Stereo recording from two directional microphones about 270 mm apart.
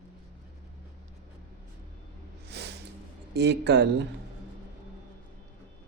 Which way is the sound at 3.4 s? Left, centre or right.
Right.